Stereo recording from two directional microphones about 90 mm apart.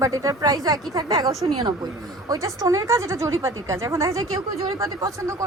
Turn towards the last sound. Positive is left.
turn(degrees=-35)  # may be behind; listen again after turning